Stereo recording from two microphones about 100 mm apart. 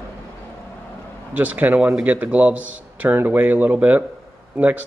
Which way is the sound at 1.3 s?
15° right (ahead or behind).